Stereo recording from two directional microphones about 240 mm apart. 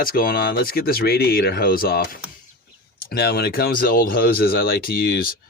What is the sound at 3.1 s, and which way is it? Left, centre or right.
Speech, left.